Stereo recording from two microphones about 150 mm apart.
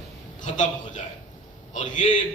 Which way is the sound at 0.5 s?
55° left (ahead or behind).